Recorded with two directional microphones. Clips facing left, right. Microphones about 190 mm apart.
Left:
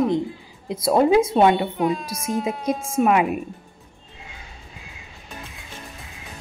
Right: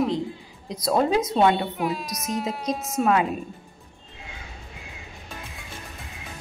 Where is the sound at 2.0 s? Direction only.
30° left (ahead or behind).